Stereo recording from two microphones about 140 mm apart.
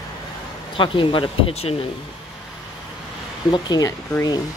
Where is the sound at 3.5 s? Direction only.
30° left (ahead or behind).